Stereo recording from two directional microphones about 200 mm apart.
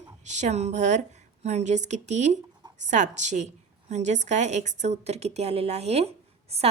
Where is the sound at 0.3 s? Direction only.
35° right (ahead or behind).